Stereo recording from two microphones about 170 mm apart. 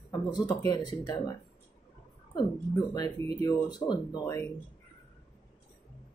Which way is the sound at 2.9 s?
25° left (ahead or behind).